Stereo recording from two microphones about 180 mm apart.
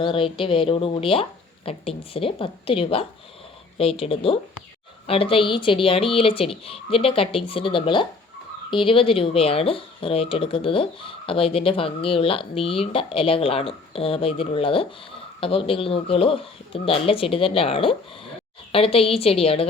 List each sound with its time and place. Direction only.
0.0 s speech: 30° left (ahead or behind)